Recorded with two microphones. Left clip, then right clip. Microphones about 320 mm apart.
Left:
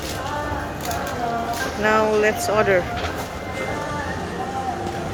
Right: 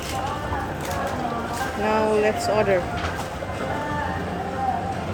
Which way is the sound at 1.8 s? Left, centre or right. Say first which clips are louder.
Left 3 dB; centre.